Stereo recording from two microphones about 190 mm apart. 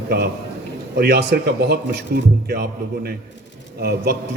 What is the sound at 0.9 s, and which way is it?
A man's voice, 60° right (ahead or behind).